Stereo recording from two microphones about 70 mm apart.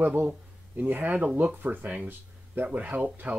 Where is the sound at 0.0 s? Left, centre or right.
Right.